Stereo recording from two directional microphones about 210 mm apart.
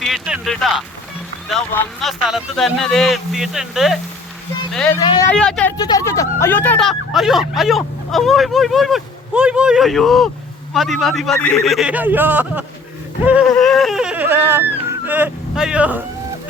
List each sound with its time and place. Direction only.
0.0 s speech: centre (ahead or behind)
4.9 s speech: 20° left (ahead or behind)
5.3 s speech: 5° left (ahead or behind)
5.7 s speech: 20° left (ahead or behind); by 16.0 s 5° right (ahead or behind)